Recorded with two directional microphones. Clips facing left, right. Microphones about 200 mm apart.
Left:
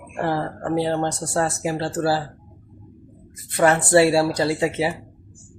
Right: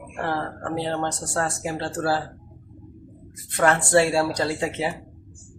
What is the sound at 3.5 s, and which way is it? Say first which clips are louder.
Speech: left 3 dB; 5° left (ahead or behind).